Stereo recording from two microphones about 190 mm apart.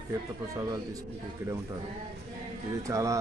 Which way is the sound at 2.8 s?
15° right (ahead or behind).